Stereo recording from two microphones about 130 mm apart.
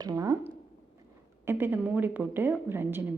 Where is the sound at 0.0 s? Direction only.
25° right (ahead or behind).